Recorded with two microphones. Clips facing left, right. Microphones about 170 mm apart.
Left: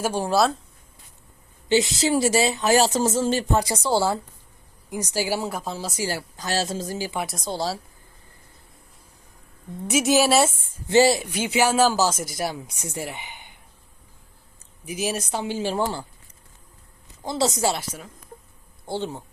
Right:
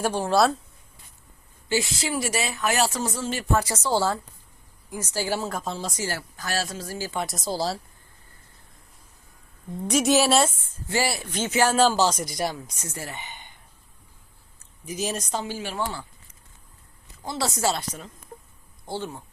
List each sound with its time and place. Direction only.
0.0 s a woman's voice: 10° left (ahead or behind)
1.7 s a woman's voice: 20° left (ahead or behind)
7.3 s a woman's voice: centre (ahead or behind)
9.8 s a woman's voice: 5° left (ahead or behind)
10.8 s a woman's voice: 20° left (ahead or behind)
14.8 s a woman's voice: 10° left (ahead or behind)
15.5 s speech: 30° left (ahead or behind)
17.2 s a woman's voice: 20° left (ahead or behind); by 18.1 s 5° left (ahead or behind)
18.9 s speech: 20° left (ahead or behind)